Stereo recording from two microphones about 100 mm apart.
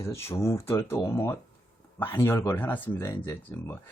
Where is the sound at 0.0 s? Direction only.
30° left (ahead or behind).